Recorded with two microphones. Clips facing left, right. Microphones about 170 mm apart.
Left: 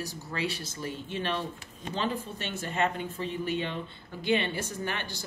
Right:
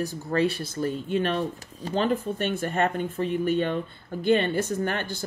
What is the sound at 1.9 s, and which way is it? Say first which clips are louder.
Speech: right 8 dB; 50° right (ahead or behind).